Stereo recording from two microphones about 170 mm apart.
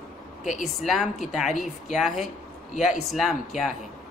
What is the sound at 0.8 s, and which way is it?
Speech, centre (ahead or behind).